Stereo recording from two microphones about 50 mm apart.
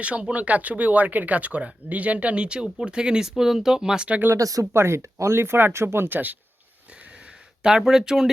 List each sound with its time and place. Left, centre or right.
0.0 s speech: right
4.7 s speech: right
6.1 s speech: right
7.6 s speech: centre